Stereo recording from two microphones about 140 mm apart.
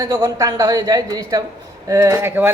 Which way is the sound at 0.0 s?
25° right (ahead or behind).